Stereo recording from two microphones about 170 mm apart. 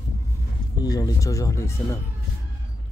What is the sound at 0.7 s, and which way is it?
Speech, 20° left (ahead or behind).